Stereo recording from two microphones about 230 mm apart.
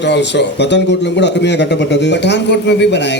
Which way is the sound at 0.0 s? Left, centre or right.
Left.